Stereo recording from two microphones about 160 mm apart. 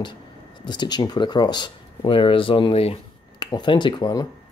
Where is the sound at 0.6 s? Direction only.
25° left (ahead or behind).